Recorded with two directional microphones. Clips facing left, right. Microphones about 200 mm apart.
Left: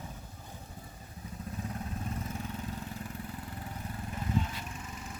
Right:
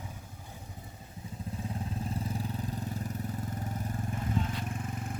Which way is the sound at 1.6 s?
30° right (ahead or behind).